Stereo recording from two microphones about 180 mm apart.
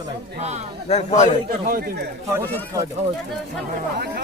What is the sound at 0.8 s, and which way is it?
Speech, 35° left (ahead or behind).